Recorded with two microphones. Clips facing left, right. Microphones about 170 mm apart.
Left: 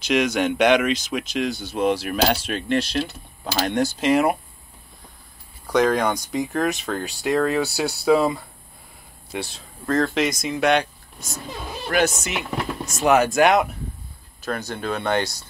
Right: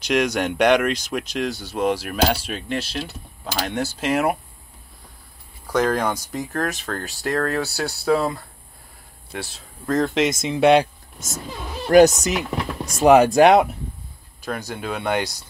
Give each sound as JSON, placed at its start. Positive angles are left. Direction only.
{"t": 0.1, "sound": "speech", "side_deg": 5}
{"t": 1.6, "sound": "speech", "side_deg": -10}
{"t": 5.7, "sound": "speech", "side_deg": -5}
{"t": 9.8, "sound": "speech", "side_deg": -15}
{"t": 11.1, "sound": "speech", "side_deg": -45}
{"t": 14.4, "sound": "speech", "side_deg": -10}